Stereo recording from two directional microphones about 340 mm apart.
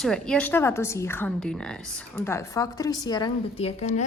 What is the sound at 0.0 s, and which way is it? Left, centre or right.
A woman's voice, centre.